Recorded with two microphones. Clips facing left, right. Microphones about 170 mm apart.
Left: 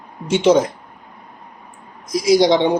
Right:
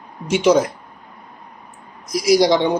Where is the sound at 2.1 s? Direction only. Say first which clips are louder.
Left 1 dB; 25° left (ahead or behind).